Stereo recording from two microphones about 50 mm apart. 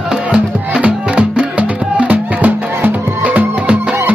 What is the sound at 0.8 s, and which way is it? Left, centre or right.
Music, right.